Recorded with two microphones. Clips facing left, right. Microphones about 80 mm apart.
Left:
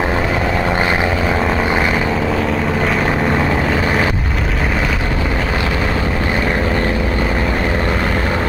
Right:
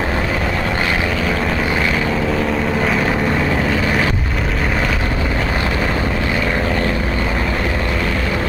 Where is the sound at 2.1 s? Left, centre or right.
Centre.